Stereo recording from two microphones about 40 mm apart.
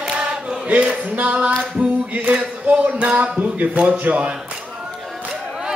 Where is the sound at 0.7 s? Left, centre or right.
Right.